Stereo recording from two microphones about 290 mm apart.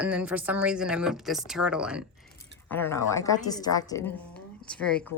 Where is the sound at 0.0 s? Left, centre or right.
Centre.